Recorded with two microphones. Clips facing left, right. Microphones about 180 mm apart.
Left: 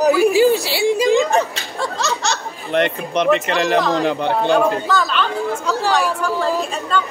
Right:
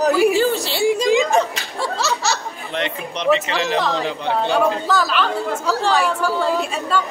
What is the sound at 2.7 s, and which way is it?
Speech, 55° left (ahead or behind).